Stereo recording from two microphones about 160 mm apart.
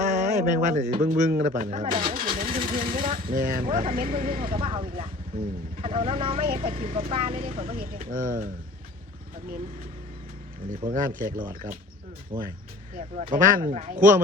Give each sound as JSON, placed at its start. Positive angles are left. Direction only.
{"t": 0.0, "sound": "a man's voice", "side_deg": -50}
{"t": 2.0, "sound": "speech", "side_deg": -65}
{"t": 4.5, "sound": "speech", "side_deg": -35}
{"t": 5.3, "sound": "speech", "side_deg": -65}
{"t": 5.8, "sound": "speech", "side_deg": -35}
{"t": 7.8, "sound": "speech", "side_deg": -55}
{"t": 11.1, "sound": "speech", "side_deg": -55}
{"t": 12.3, "sound": "speech", "side_deg": -35}
{"t": 12.9, "sound": "a man's voice", "side_deg": -55}